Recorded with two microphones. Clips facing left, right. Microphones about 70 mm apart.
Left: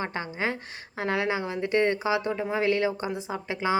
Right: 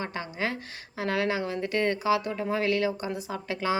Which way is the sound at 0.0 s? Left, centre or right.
Left.